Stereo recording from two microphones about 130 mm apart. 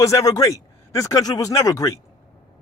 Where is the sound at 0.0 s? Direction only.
25° left (ahead or behind).